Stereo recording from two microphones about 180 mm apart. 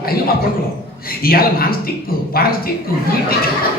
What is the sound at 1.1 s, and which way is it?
A man's voice, 55° left (ahead or behind).